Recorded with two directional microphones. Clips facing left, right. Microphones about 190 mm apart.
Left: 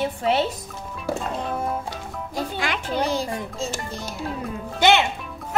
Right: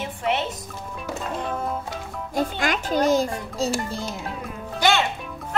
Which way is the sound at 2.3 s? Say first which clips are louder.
Right 3 dB; 45° right (ahead or behind).